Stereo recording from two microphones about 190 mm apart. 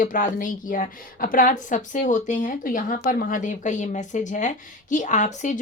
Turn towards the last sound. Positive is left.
turn(degrees=40)  # may be behind; listen again after turning